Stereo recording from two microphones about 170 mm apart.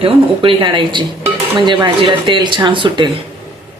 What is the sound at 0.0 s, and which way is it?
Dishes, 30° right (ahead or behind).